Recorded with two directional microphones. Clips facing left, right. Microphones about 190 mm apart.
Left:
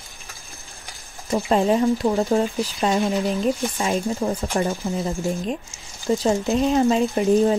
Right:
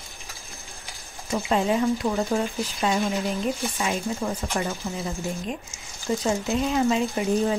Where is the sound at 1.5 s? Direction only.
35° left (ahead or behind).